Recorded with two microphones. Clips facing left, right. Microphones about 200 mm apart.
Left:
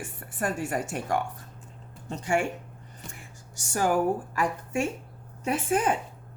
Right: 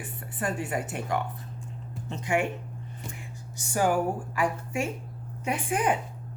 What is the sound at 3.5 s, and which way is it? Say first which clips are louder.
Speech: right 2 dB; 40° left (ahead or behind).